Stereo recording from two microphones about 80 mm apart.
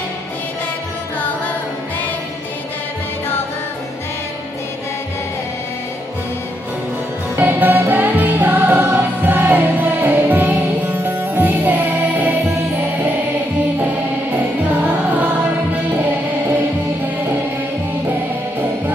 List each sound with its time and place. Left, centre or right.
7.3 s music: right